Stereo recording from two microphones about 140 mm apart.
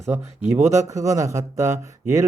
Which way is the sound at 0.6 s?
20° right (ahead or behind).